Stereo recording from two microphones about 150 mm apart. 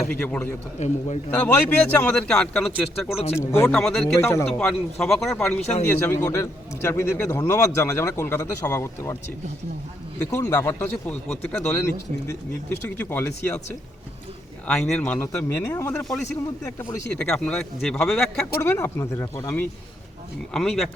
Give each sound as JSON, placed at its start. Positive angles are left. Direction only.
{"t": 0.1, "sound": "a man's voice", "side_deg": 10}
{"t": 0.8, "sound": "a man's voice", "side_deg": 50}
{"t": 1.3, "sound": "a man's voice", "side_deg": 10}
{"t": 3.4, "sound": "speech", "side_deg": 20}
{"t": 3.7, "sound": "speech", "side_deg": 5}
{"t": 4.2, "sound": "a man's voice", "side_deg": 20}
{"t": 4.5, "sound": "speech", "side_deg": 5}
{"t": 5.9, "sound": "a man's voice", "side_deg": 15}
{"t": 10.3, "sound": "a man's voice", "side_deg": 20}
{"t": 14.7, "sound": "a man's voice", "side_deg": 5}
{"t": 18.6, "sound": "speech", "side_deg": 15}
{"t": 20.5, "sound": "speech", "side_deg": 0}